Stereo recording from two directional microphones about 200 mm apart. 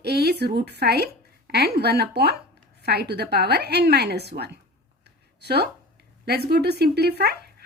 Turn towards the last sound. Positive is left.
turn(degrees=-50)  # may be behind; listen again after turning